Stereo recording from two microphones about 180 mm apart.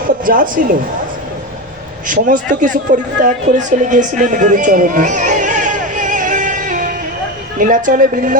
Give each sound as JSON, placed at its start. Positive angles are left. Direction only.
{"t": 0.0, "sound": "speech", "side_deg": -50}
{"t": 2.0, "sound": "a woman's voice", "side_deg": -45}